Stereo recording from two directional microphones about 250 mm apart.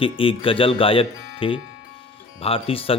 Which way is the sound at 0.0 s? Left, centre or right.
Left.